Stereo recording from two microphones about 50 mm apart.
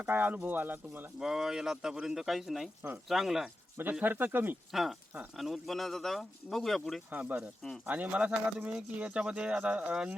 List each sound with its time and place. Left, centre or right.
0.1 s speech: right
1.2 s speech: centre
4.0 s speech: right
4.7 s speech: centre
7.1 s speech: right